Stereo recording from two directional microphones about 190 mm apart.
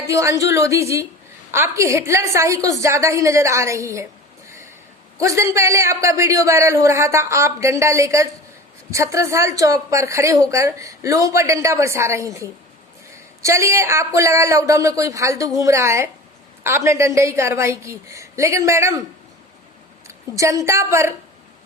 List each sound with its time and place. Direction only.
0.1 s a man's voice: 15° right (ahead or behind)
4.4 s a sound: 15° right (ahead or behind)
5.2 s a man's voice: 15° right (ahead or behind)
20.1 s a woman's voice: 15° right (ahead or behind)